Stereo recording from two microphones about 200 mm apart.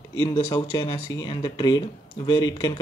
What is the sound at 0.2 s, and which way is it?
Speech, 20° left (ahead or behind).